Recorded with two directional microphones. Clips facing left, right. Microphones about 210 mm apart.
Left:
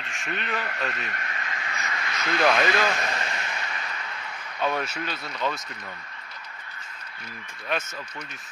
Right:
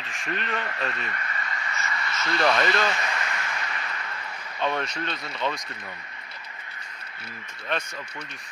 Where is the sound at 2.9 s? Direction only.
40° left (ahead or behind).